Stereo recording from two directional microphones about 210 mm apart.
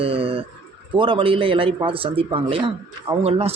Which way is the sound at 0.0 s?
25° right (ahead or behind).